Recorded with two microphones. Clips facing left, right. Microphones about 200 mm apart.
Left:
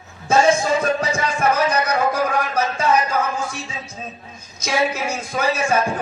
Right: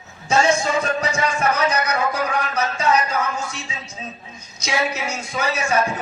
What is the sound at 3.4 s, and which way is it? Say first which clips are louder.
Speech: left 3 dB; 55° left (ahead or behind).